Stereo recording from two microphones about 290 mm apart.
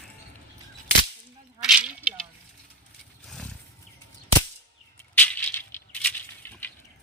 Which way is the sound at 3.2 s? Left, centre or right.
Centre.